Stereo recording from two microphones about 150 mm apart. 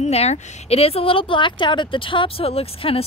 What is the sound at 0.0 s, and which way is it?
A woman's voice, 45° left (ahead or behind).